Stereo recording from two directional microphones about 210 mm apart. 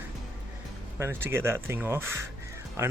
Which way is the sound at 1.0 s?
10° right (ahead or behind).